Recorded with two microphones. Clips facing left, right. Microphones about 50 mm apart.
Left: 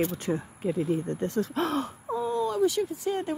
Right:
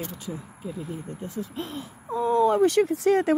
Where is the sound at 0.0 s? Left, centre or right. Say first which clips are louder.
Left 7 dB; left.